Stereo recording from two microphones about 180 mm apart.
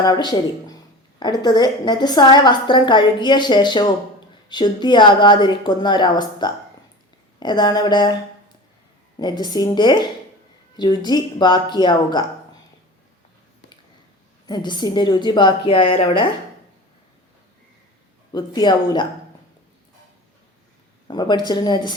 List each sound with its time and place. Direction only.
0.0 s a woman's voice: 20° left (ahead or behind)
9.1 s a woman's voice: 25° left (ahead or behind)
14.4 s a woman's voice: 25° left (ahead or behind)
18.3 s a woman's voice: 20° left (ahead or behind)
21.1 s a woman's voice: 25° left (ahead or behind)